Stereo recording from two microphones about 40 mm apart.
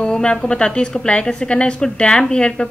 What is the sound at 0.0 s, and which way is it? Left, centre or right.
A woman's voice, left.